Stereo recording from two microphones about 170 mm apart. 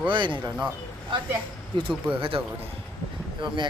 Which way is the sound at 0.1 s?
30° right (ahead or behind).